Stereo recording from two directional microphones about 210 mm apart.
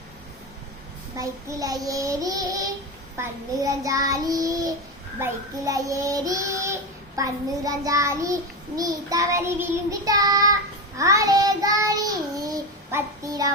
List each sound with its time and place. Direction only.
1.1 s child singing: 15° right (ahead or behind)